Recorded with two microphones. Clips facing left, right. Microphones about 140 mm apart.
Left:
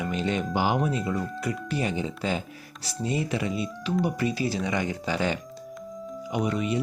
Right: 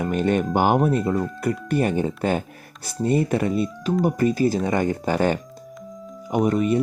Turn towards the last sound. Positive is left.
turn(degrees=-50)  # may be behind; listen again after turning